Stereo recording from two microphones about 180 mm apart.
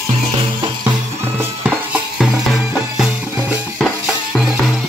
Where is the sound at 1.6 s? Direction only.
Centre (ahead or behind).